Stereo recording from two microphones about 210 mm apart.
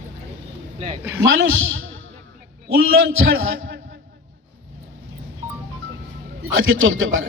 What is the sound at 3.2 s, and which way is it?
Speech, 70° right (ahead or behind).